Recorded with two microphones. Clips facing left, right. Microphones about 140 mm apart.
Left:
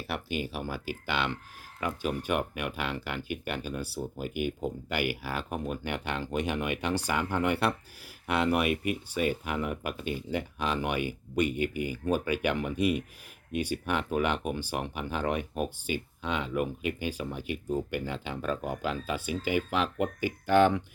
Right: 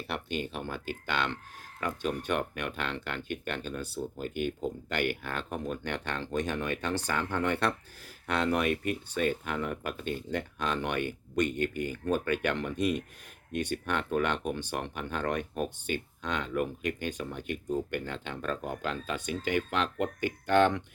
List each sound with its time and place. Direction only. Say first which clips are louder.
0.1 s speech: left 1 dB; 5° left (ahead or behind)